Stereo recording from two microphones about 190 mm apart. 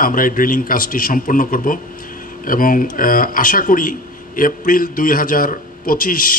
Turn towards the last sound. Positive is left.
turn(degrees=45)  # may be behind; listen again after turning